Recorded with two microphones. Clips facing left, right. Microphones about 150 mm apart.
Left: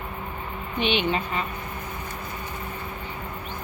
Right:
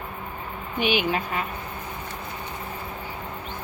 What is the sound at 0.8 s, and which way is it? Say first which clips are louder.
Speech: even; 5° right (ahead or behind).